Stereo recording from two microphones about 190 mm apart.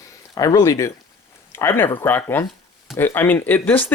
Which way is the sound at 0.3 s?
20° left (ahead or behind).